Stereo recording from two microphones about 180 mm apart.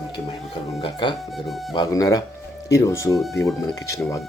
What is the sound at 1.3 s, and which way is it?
Speech, centre (ahead or behind).